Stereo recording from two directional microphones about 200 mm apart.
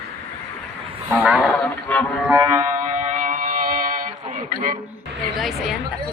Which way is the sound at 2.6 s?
40° right (ahead or behind).